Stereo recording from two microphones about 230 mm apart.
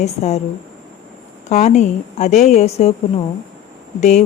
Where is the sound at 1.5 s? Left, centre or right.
Left.